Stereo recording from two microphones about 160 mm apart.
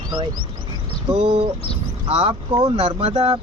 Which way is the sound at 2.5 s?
25° right (ahead or behind).